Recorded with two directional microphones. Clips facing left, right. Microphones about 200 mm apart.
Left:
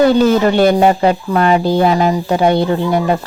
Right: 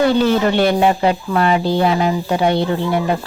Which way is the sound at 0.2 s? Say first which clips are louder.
Left 4 dB; 45° left (ahead or behind).